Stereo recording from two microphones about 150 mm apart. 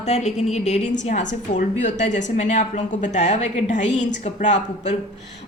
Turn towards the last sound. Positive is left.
turn(degrees=50)  # may be behind; listen again after turning